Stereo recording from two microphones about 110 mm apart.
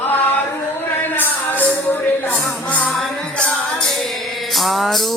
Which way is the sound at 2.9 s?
5° left (ahead or behind).